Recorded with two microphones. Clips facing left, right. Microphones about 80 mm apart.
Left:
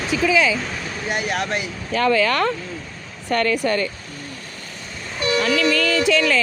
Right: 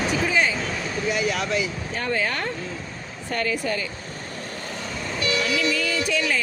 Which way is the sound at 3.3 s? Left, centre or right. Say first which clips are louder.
Left 6 dB; left.